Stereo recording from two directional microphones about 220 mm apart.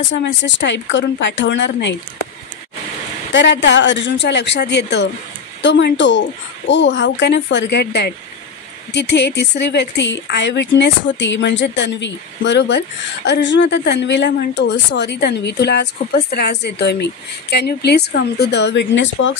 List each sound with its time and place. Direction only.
0.1 s speech: 55° left (ahead or behind)
3.3 s speech: 55° left (ahead or behind)